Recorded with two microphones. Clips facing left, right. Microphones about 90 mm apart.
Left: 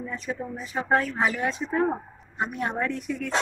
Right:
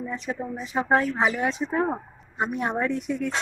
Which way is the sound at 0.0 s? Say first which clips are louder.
Right 2 dB; 20° right (ahead or behind).